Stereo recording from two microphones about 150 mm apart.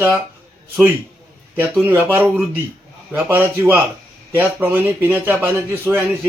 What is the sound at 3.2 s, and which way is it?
Speech, 15° right (ahead or behind).